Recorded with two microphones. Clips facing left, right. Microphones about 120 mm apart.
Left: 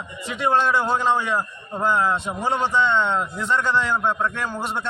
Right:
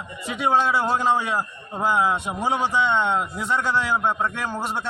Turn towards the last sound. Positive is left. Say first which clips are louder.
# even
turn(degrees=-10)  # may be behind; listen again after turning